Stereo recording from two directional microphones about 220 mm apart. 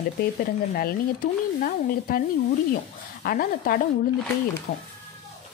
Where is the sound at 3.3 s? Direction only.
40° left (ahead or behind).